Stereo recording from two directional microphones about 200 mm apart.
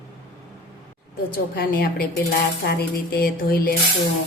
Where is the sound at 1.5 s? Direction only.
50° left (ahead or behind).